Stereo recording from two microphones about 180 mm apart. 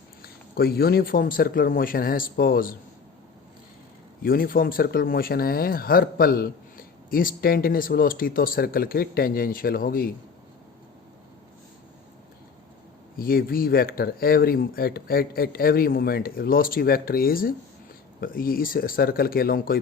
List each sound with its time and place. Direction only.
0.2 s speech: 60° left (ahead or behind)
4.2 s speech: 55° left (ahead or behind)
13.1 s speech: 55° left (ahead or behind)